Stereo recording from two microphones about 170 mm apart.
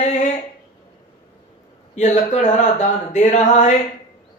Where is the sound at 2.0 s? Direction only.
45° left (ahead or behind).